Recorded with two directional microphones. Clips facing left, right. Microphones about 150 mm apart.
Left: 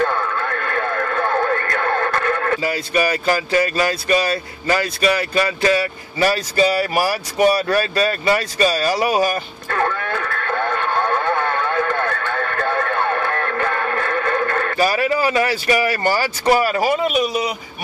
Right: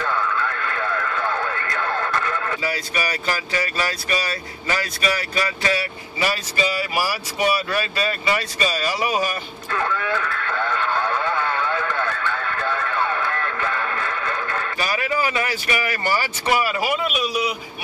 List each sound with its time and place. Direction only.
0.0 s radio: 50° left (ahead or behind)
5.6 s speech: 40° left (ahead or behind)
9.7 s radio: 50° left (ahead or behind)
14.9 s speech: 35° left (ahead or behind)